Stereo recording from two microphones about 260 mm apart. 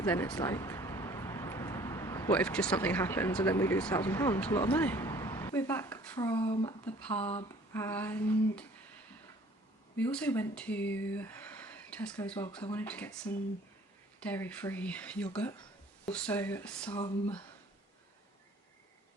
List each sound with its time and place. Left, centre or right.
0.0 s speech: centre
6.1 s speech: centre
6.8 s speech: centre
10.0 s speech: centre